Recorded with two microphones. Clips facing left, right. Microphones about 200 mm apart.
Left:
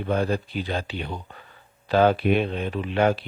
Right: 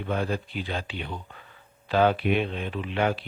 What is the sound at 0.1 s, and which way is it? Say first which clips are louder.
Speech: left 4 dB; 40° left (ahead or behind).